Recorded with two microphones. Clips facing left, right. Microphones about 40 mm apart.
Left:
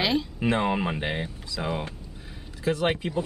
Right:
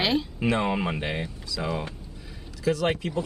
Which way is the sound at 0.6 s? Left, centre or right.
Centre.